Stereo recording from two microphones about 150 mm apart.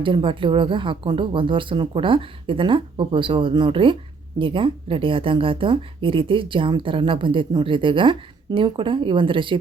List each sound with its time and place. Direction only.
0.0 s speech: 35° right (ahead or behind)